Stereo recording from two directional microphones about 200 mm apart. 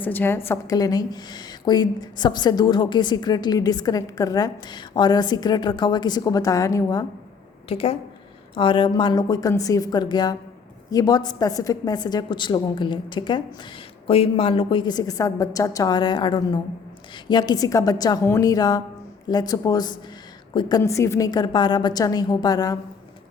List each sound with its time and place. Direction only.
0.0 s a woman's voice: 10° left (ahead or behind)
7.7 s a woman's voice: 30° left (ahead or behind)